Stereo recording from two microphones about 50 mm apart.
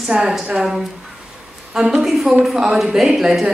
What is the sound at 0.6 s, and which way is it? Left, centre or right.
Speech, centre.